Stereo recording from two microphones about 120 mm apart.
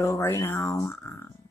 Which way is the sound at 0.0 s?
25° left (ahead or behind).